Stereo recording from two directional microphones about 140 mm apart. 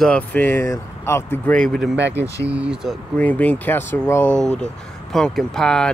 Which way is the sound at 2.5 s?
5° right (ahead or behind).